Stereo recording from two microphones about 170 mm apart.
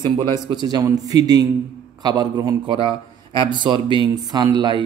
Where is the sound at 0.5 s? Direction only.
25° right (ahead or behind).